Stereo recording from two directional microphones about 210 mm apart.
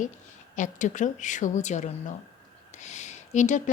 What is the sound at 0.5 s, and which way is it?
Speech, 35° left (ahead or behind).